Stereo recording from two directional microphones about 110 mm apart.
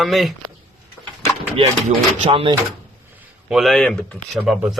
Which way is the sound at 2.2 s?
50° right (ahead or behind).